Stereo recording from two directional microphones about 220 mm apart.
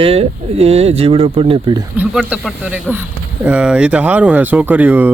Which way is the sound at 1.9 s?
10° right (ahead or behind).